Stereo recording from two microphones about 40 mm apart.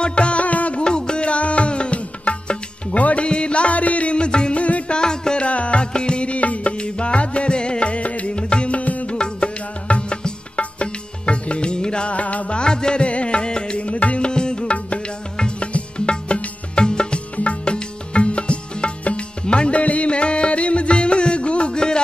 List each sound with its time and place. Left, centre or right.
0.0 s music: left
0.8 s music: left
3.3 s music: left
4.9 s music: centre
5.4 s music: left
8.4 s music: left
9.1 s music: left
12.2 s music: left
12.5 s music: left